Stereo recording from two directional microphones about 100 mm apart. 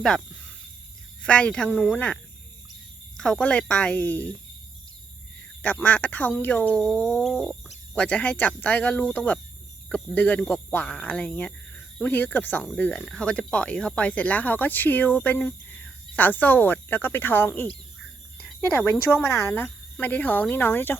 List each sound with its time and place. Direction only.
1.2 s speech: 10° left (ahead or behind)
3.2 s speech: 10° left (ahead or behind)
5.8 s speech: 15° left (ahead or behind)
6.8 s a sound: 10° left (ahead or behind)
7.9 s speech: 10° left (ahead or behind)
18.3 s cricket: 10° left (ahead or behind)
18.9 s speech: 20° left (ahead or behind)